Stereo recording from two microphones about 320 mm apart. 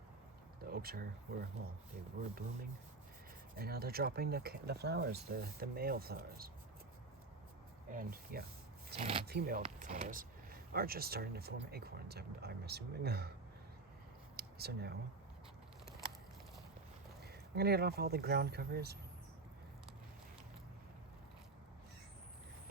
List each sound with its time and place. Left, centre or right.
0.6 s a sound: right
3.5 s speech: right
7.9 s speech: right
9.2 s speech: right
14.3 s a sound: right
17.2 s speech: right